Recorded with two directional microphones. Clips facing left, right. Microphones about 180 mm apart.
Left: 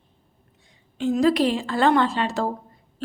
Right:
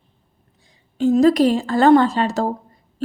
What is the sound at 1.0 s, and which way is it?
A woman's voice, 40° right (ahead or behind).